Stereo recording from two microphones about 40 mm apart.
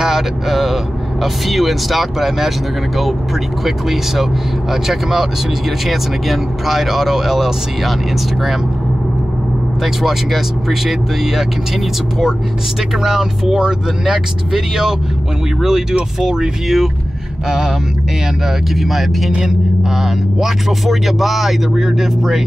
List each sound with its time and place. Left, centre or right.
0.0 s speech: centre
3.6 s speech: centre
10.0 s speech: centre
13.0 s speech: centre
18.8 s speech: centre